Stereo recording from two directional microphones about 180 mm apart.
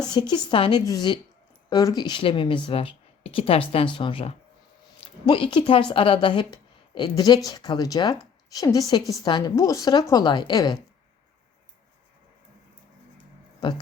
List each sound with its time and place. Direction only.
0.0 s speech: 25° left (ahead or behind)
13.6 s speech: 25° left (ahead or behind)